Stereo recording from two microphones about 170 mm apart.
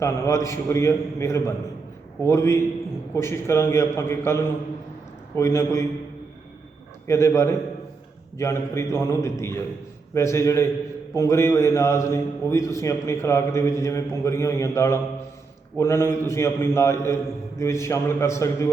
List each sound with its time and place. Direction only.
0.0 s a man's voice: 15° left (ahead or behind)
7.1 s a man's voice: 15° left (ahead or behind)